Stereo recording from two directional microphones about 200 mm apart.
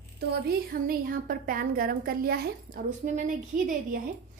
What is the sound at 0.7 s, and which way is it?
A woman's voice, 45° right (ahead or behind).